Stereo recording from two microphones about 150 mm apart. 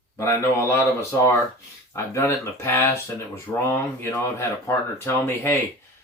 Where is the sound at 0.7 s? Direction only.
20° left (ahead or behind).